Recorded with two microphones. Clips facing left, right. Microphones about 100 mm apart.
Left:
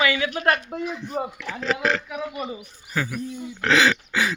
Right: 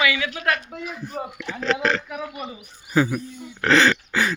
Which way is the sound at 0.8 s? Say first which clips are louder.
Left 3 dB; 5° right (ahead or behind).